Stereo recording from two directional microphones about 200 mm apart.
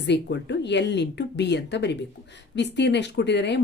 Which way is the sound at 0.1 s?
60° left (ahead or behind).